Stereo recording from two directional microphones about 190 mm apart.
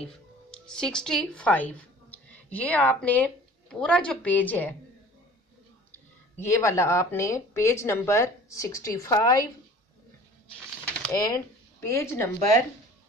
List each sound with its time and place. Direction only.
0.1 s speech: 5° left (ahead or behind)
6.4 s speech: 15° left (ahead or behind)
11.1 s speech: 20° left (ahead or behind)